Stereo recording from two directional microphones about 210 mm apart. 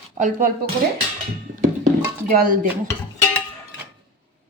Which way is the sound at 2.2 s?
40° right (ahead or behind).